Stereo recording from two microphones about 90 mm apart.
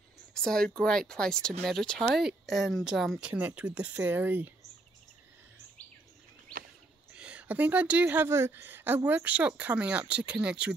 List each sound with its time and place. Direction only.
0.3 s speech: 5° left (ahead or behind)
3.2 s a woman's voice: 15° right (ahead or behind)
7.2 s a woman's voice: 15° right (ahead or behind)